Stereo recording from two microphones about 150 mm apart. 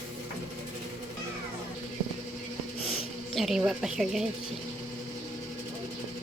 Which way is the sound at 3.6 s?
5° right (ahead or behind).